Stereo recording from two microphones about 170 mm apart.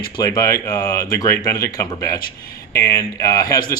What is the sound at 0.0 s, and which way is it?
Speech, 20° left (ahead or behind).